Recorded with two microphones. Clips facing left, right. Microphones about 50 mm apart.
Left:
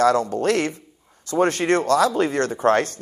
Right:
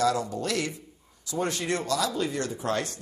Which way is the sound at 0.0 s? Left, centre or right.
Left.